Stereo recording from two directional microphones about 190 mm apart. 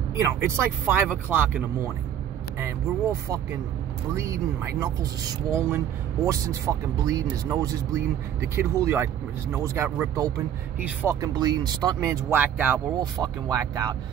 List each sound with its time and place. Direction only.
0.3 s speech: 15° right (ahead or behind)
2.6 s speech: 15° right (ahead or behind)